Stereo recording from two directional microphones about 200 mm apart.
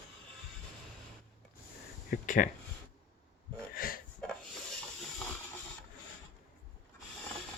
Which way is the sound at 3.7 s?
45° left (ahead or behind).